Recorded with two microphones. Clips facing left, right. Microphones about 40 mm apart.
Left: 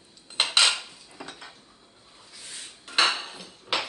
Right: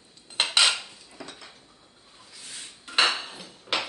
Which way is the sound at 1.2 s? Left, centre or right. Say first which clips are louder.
Left 1 dB; left.